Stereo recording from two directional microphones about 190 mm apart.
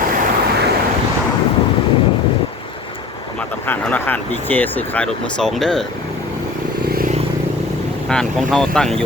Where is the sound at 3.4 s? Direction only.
10° left (ahead or behind).